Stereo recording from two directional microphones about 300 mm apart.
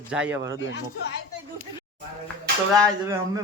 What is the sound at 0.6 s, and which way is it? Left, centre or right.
Speech, left.